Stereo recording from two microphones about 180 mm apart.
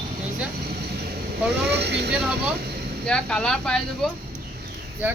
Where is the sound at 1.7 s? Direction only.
65° right (ahead or behind).